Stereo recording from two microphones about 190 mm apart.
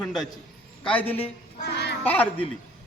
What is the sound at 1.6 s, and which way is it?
Child singing, 60° left (ahead or behind).